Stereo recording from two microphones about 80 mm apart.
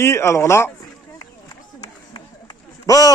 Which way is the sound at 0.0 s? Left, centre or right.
Left.